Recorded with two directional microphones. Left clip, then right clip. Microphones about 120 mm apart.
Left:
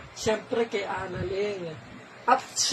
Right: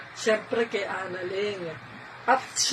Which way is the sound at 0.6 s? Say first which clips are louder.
Even; 30° left (ahead or behind).